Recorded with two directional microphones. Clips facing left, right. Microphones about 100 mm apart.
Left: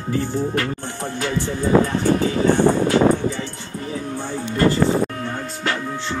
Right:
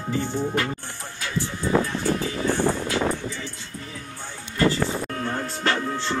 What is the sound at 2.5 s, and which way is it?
Music, 60° left (ahead or behind).